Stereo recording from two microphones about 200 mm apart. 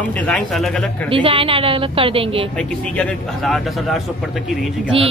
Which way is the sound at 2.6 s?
5° left (ahead or behind).